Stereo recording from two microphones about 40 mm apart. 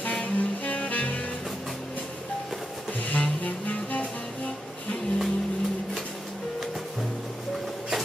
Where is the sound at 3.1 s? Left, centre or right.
Left.